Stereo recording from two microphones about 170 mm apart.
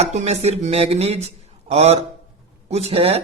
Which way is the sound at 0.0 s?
40° right (ahead or behind).